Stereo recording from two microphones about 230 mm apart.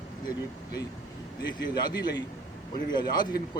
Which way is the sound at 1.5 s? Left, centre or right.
Centre.